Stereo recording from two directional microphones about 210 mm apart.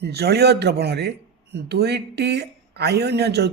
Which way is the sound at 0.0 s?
50° right (ahead or behind).